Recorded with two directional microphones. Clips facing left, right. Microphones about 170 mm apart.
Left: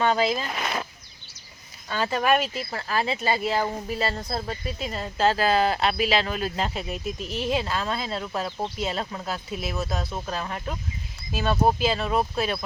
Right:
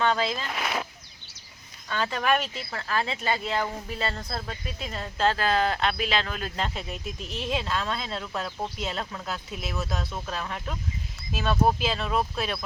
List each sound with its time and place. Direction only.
0.0 s speech: 10° left (ahead or behind)
1.9 s speech: 5° left (ahead or behind)
4.2 s speech: 20° left (ahead or behind)
4.4 s speech: 5° left (ahead or behind)